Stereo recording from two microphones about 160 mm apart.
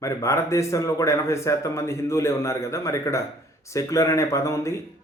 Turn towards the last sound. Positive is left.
turn(degrees=20)  # may be behind; listen again after turning